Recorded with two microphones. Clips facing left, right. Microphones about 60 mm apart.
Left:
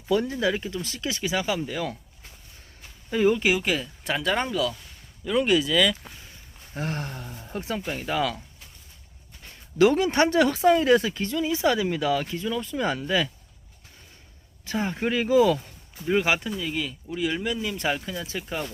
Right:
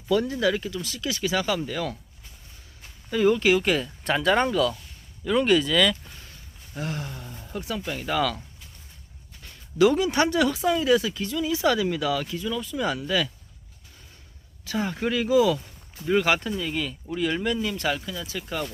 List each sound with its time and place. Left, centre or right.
0.1 s speech: left
0.8 s speech: left; by 2.0 s centre
3.1 s speech: centre
6.7 s speech: left
7.5 s speech: left
7.9 s speech: centre
9.7 s speech: left
14.6 s speech: left
15.2 s speech: left
16.0 s speech: centre
17.7 s speech: left
18.4 s speech: centre